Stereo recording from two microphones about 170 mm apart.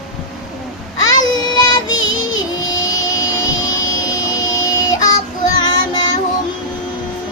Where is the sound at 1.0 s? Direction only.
25° left (ahead or behind).